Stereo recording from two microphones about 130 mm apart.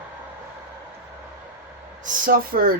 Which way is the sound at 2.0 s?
90° right.